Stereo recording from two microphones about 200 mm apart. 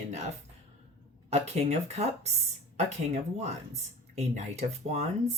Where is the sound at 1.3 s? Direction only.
35° right (ahead or behind).